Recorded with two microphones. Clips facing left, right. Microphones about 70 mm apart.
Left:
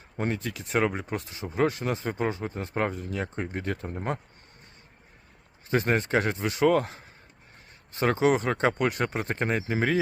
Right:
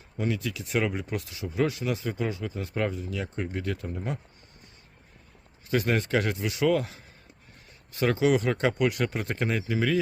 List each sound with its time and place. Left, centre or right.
0.2 s speech: left
5.7 s speech: left